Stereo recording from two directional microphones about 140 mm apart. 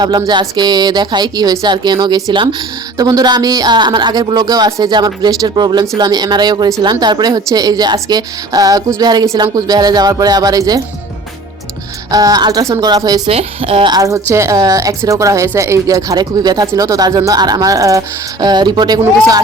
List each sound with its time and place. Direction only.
0.0 s speech: 30° right (ahead or behind)
12.1 s speech: 25° right (ahead or behind)
13.2 s a woman's voice: 45° right (ahead or behind)
13.9 s speech: 20° right (ahead or behind)